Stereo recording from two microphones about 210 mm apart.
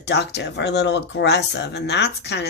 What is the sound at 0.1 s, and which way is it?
Speech, 55° left (ahead or behind).